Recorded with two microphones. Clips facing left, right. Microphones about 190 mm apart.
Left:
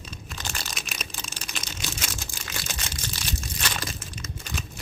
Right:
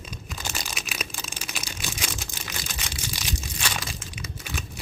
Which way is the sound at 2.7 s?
10° right (ahead or behind).